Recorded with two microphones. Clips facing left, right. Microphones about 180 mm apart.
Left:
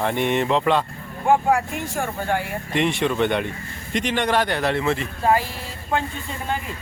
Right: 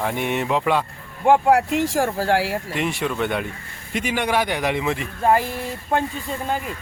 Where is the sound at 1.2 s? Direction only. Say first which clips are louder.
Right 3 dB; 70° right (ahead or behind); by 2.6 s 85° right.